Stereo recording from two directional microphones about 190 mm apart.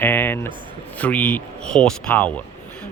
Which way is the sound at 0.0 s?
10° left (ahead or behind).